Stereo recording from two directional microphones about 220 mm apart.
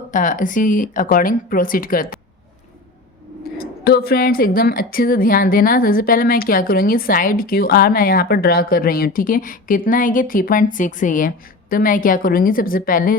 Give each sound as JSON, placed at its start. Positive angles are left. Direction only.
{"t": 0.1, "sound": "a woman's voice", "side_deg": 35}
{"t": 3.8, "sound": "a woman's voice", "side_deg": 45}